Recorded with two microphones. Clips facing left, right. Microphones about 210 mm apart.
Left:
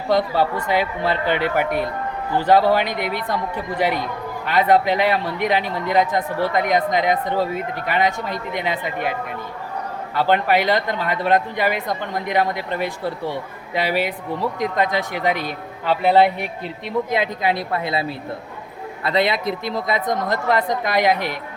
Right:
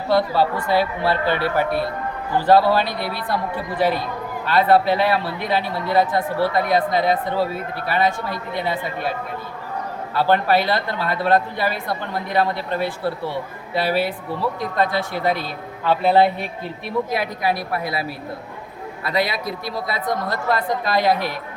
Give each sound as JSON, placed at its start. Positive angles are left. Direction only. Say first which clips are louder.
{"t": 0.1, "sound": "speech", "louder": "even", "side_deg": 15}
{"t": 10.2, "sound": "speech", "louder": "even", "side_deg": 15}
{"t": 19.0, "sound": "speech", "louder": "left 3 dB", "side_deg": 25}